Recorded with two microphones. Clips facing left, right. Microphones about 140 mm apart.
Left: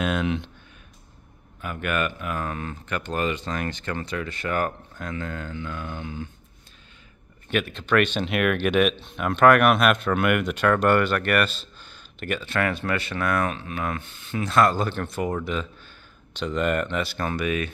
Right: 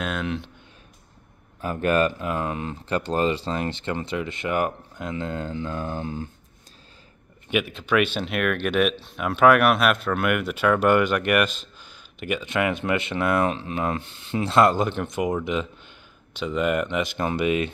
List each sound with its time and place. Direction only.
0.0 s speech: centre (ahead or behind)
1.6 s speech: 35° right (ahead or behind)
7.4 s speech: 10° right (ahead or behind)
16.3 s speech: 10° right (ahead or behind)